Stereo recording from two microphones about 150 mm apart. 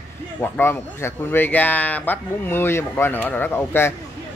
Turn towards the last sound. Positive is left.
turn(degrees=15)  # may be behind; listen again after turning